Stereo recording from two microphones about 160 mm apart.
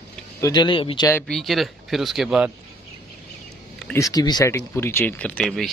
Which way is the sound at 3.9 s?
20° left (ahead or behind).